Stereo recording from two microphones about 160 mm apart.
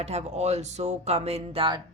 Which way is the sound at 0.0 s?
45° right (ahead or behind).